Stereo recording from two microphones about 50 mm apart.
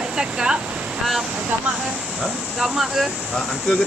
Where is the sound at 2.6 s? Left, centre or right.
Centre.